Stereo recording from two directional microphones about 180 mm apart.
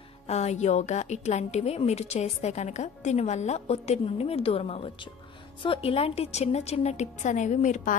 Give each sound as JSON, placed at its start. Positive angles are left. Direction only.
{"t": 0.3, "sound": "a woman's voice", "side_deg": 40}